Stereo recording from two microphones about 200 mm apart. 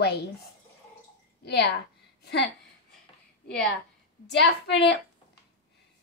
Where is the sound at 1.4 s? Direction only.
55° left (ahead or behind).